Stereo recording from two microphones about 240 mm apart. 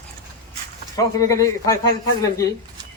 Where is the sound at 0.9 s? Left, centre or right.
Centre.